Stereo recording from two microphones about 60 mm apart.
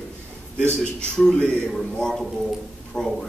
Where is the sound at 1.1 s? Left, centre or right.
Centre.